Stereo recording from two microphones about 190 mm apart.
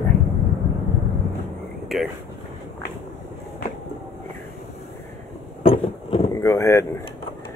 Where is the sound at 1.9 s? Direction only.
Centre (ahead or behind).